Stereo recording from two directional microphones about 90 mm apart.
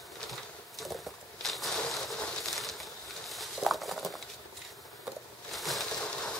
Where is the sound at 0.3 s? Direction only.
Centre (ahead or behind).